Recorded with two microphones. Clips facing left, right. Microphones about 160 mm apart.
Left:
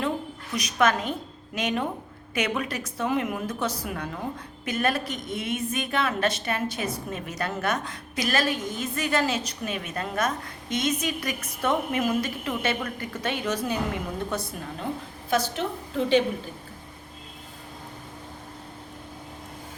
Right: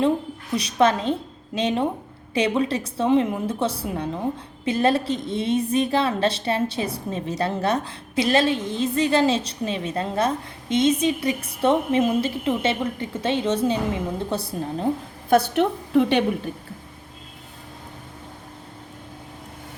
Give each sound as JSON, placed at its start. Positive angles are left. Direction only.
{"t": 0.5, "sound": "a woman's voice", "side_deg": -30}
{"t": 15.3, "sound": "a woman's voice", "side_deg": -60}